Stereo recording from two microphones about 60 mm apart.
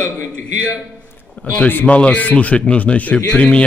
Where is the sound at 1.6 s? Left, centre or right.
Left.